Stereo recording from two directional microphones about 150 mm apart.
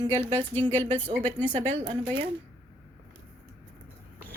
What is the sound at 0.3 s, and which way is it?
Speech, 15° left (ahead or behind).